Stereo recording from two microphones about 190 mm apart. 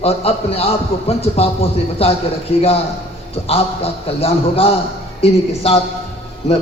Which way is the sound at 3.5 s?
30° left (ahead or behind).